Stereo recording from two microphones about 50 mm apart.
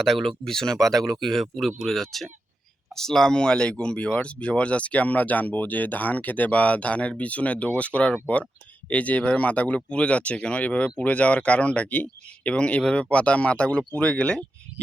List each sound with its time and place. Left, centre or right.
0.0 s speech: centre; by 14.4 s left